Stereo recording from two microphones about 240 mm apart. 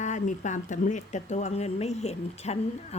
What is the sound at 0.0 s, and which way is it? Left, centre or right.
A woman's voice, left.